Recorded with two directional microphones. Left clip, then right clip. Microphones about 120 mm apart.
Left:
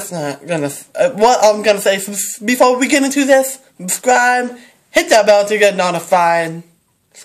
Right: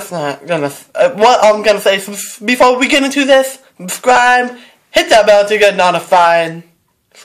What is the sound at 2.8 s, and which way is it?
Speech, 60° left (ahead or behind).